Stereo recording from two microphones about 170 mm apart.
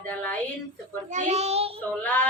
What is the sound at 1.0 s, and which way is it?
Speech, 40° right (ahead or behind).